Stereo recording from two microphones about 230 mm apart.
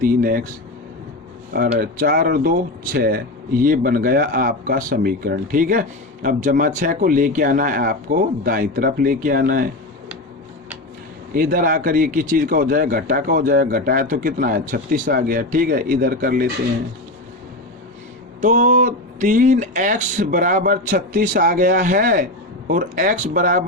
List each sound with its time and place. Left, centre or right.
0.0 s speech: right
1.7 s speech: right
11.3 s speech: right
18.3 s speech: right